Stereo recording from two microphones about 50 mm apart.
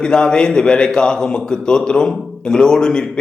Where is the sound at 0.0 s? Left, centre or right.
Centre.